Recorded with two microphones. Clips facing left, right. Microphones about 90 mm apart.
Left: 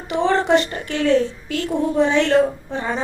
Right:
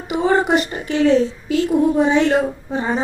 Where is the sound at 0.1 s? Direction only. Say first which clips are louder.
Even; 10° right (ahead or behind).